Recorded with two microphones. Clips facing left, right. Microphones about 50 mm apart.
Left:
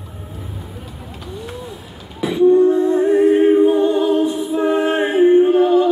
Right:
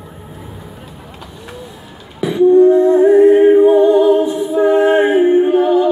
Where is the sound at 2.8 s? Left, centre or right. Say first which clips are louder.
Right 6 dB; right.